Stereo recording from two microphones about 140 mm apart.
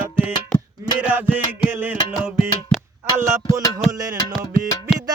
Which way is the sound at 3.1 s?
20° right (ahead or behind).